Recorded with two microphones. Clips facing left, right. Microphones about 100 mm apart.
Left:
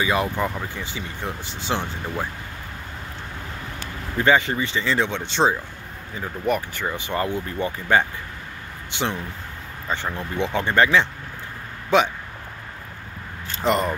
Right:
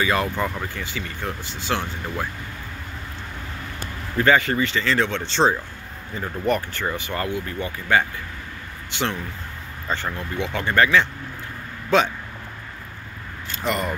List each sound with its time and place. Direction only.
0.0 s speech: 10° left (ahead or behind)
4.2 s speech: 20° left (ahead or behind)
7.2 s speech: 35° left (ahead or behind)
8.9 s speech: 15° left (ahead or behind)
13.6 s speech: 30° left (ahead or behind)